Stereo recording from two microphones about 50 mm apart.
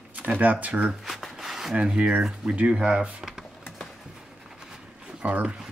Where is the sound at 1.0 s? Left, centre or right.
Centre.